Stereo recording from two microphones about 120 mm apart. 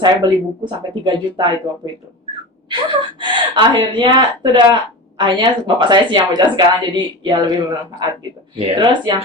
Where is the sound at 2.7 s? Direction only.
40° right (ahead or behind).